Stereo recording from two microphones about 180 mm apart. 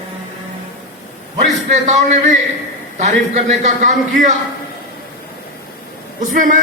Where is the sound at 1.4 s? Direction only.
40° right (ahead or behind).